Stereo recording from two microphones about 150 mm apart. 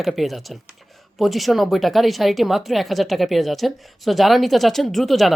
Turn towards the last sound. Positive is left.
turn(degrees=0)  # may be behind; listen again after turning